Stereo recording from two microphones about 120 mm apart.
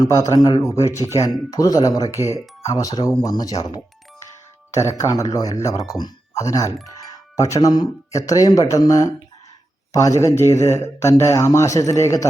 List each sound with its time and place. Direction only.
0.0 s speech: 35° left (ahead or behind)